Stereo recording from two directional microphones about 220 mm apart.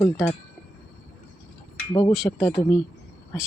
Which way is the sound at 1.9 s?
20° left (ahead or behind).